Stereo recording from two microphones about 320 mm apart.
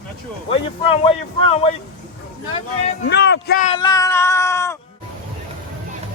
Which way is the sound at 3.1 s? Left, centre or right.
Left.